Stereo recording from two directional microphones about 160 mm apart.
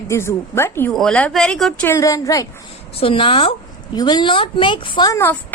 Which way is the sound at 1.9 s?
20° left (ahead or behind).